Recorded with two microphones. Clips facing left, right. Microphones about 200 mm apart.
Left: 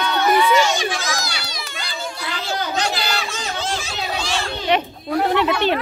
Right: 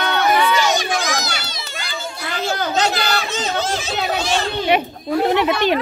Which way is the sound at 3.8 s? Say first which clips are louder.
Right 5 dB; 20° right (ahead or behind).